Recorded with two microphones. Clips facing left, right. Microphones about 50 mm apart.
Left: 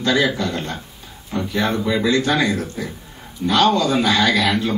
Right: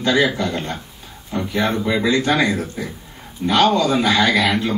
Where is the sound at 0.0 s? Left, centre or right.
Right.